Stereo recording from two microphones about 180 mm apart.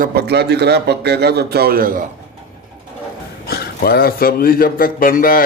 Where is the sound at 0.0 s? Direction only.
60° right (ahead or behind).